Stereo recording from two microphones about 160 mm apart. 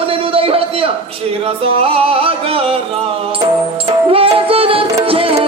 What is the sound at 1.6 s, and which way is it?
Speech, 35° right (ahead or behind).